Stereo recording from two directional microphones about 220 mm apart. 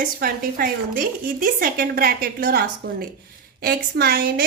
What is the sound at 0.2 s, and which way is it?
A woman's voice, 40° right (ahead or behind).